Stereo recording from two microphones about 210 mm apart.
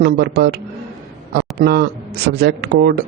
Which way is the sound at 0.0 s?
55° right (ahead or behind).